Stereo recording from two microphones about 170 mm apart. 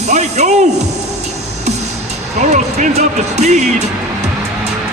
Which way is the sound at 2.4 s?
45° right (ahead or behind).